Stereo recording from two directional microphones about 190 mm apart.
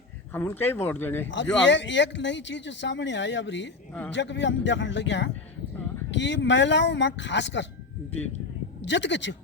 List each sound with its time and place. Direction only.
0.3 s speech: 10° left (ahead or behind)
1.6 s speech: 70° left (ahead or behind)
8.8 s speech: 70° left (ahead or behind)